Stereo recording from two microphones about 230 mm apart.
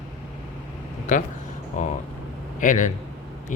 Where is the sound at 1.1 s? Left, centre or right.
Left.